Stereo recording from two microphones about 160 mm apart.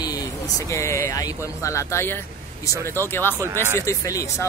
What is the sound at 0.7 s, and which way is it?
Speech, 20° left (ahead or behind).